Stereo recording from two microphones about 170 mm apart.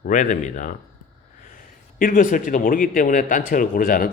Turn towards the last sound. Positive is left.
turn(degrees=55)  # may be behind; listen again after turning